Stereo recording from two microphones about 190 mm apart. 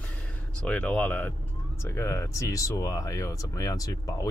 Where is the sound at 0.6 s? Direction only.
5° left (ahead or behind).